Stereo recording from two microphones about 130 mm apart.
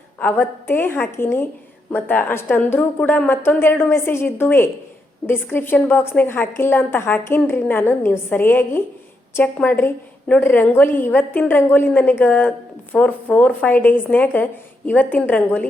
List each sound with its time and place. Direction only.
0.2 s a woman's voice: 15° left (ahead or behind)